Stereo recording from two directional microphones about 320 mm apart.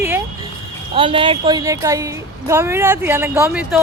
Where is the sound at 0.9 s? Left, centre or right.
Centre.